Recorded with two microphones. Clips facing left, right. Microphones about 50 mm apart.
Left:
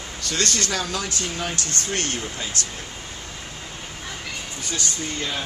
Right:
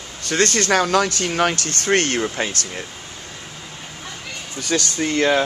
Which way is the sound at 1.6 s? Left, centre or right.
Right.